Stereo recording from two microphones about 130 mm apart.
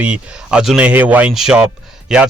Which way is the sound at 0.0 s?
10° right (ahead or behind).